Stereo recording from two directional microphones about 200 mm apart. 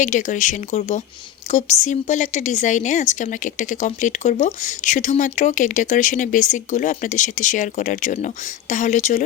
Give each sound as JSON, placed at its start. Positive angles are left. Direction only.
{"t": 0.0, "sound": "a woman's voice", "side_deg": 40}